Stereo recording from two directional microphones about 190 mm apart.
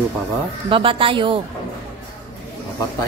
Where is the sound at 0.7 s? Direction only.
30° right (ahead or behind).